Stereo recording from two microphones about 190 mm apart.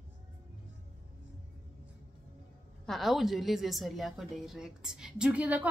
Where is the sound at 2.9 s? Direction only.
Centre (ahead or behind).